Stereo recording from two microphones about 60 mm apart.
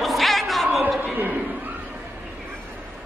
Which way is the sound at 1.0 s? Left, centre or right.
Right.